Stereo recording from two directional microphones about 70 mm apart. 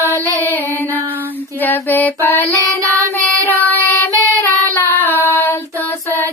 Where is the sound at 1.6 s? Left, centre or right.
Left.